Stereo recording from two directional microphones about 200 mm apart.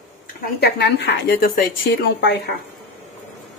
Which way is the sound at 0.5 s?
55° left (ahead or behind).